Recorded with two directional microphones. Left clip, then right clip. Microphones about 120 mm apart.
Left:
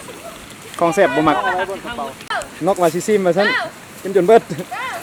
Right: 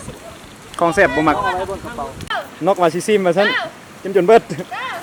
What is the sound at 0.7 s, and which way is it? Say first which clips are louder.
Speech: even; centre (ahead or behind).